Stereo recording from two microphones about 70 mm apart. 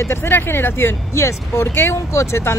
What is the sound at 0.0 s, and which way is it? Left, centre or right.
Speech, left.